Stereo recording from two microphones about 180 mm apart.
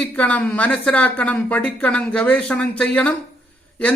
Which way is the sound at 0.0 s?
10° left (ahead or behind).